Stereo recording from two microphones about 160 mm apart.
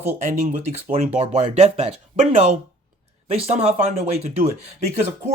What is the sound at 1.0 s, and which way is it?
Speech, 40° right (ahead or behind).